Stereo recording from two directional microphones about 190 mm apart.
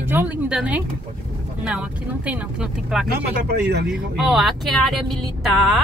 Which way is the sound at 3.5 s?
60° right (ahead or behind).